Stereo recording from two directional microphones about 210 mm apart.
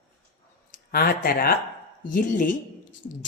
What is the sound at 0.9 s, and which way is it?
A woman's voice, 45° left (ahead or behind).